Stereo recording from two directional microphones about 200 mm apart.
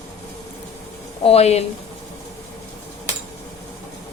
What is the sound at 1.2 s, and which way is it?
Speech, 30° left (ahead or behind).